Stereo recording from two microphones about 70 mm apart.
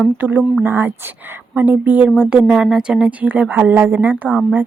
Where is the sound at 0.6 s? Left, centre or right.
Right.